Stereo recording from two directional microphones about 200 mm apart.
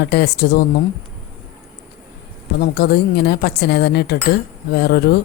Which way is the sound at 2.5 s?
55° left (ahead or behind).